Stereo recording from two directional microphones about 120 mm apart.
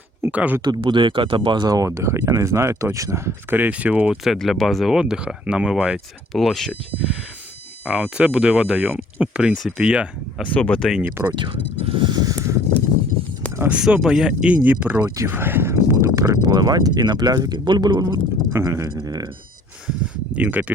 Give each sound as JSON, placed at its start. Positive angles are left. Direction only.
{"t": 0.2, "sound": "speech", "side_deg": -10}
{"t": 0.6, "sound": "speech", "side_deg": -40}
{"t": 10.4, "sound": "speech", "side_deg": 10}
{"t": 11.0, "sound": "speech", "side_deg": -15}
{"t": 11.3, "sound": "speech", "side_deg": -50}
{"t": 13.6, "sound": "speech", "side_deg": -10}
{"t": 15.0, "sound": "speech", "side_deg": -25}
{"t": 18.5, "sound": "speech", "side_deg": -25}
{"t": 20.3, "sound": "speech", "side_deg": -15}